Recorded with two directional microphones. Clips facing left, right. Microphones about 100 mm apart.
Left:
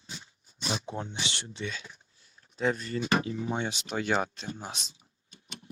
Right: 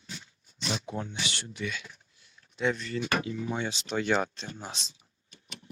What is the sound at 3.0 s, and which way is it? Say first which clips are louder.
Speech: left 3 dB; 30° left (ahead or behind).